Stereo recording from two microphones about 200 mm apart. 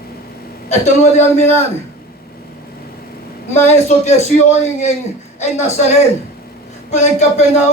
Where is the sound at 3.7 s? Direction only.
35° left (ahead or behind).